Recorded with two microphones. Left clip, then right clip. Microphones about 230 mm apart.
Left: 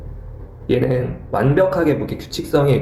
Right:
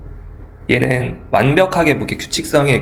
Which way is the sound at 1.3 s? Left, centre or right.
Right.